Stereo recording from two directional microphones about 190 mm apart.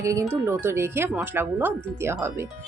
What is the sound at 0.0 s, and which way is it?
Speech, 15° right (ahead or behind).